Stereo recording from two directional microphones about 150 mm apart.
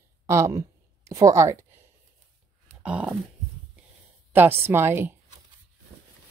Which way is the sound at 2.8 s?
10° right (ahead or behind).